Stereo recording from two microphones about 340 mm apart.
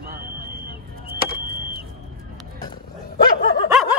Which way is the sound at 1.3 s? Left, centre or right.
Right.